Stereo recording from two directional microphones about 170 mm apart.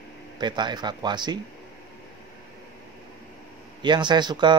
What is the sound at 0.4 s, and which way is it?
Speech, 25° right (ahead or behind).